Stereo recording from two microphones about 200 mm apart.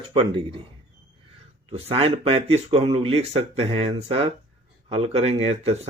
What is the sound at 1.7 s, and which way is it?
Speech, 30° right (ahead or behind).